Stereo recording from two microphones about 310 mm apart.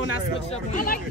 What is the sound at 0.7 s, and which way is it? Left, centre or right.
Speech, left.